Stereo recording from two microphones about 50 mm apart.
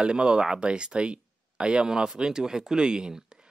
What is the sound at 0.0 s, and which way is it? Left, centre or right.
Speech, centre.